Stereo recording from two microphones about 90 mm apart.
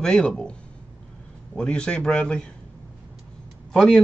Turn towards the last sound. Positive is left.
turn(degrees=5)  # may be behind; listen again after turning